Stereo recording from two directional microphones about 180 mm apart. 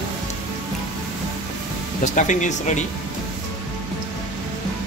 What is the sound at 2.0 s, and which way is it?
Speech, 45° left (ahead or behind).